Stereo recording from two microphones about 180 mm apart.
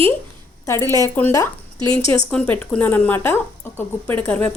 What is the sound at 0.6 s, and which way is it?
A woman's voice, 15° left (ahead or behind).